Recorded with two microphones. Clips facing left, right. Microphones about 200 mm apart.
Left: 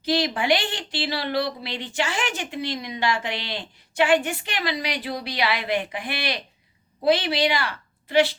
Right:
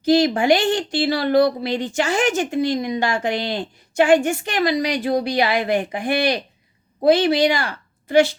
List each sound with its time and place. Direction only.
0.0 s a woman's voice: 45° right (ahead or behind)